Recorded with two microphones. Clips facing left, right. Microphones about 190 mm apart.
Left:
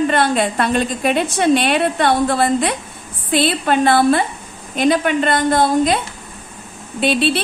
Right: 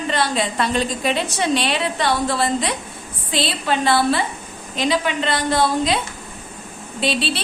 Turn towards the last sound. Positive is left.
turn(degrees=55)  # may be behind; listen again after turning